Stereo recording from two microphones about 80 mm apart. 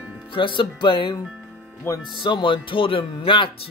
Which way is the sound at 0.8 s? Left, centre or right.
Left.